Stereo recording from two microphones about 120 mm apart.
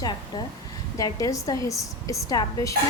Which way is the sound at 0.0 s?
35° left (ahead or behind).